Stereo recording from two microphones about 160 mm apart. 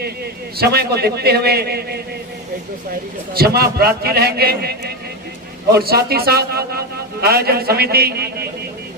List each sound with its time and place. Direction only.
0.5 s a man's voice: 80° right
3.3 s a man's voice: 80° right